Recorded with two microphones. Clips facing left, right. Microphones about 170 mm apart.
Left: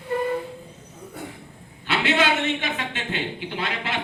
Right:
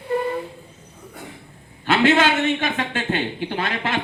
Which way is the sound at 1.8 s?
50° right (ahead or behind).